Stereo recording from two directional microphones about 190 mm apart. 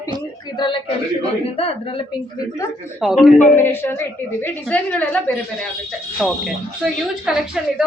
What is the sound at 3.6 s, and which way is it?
A woman's voice, 10° left (ahead or behind).